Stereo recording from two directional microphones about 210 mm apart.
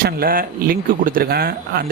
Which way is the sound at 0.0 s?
45° right (ahead or behind).